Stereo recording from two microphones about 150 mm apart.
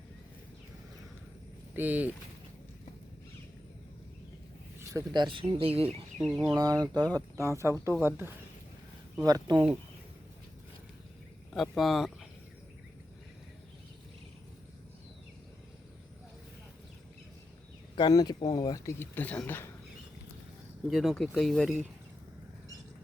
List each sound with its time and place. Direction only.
1.7 s speech: 10° right (ahead or behind)
4.8 s speech: 25° right (ahead or behind)
6.1 s speech: centre (ahead or behind)
6.5 s speech: 25° right (ahead or behind)
9.2 s speech: 25° right (ahead or behind)
11.5 s speech: centre (ahead or behind)
17.9 s speech: 25° left (ahead or behind)
18.9 s speech: 10° left (ahead or behind)
20.8 s speech: centre (ahead or behind)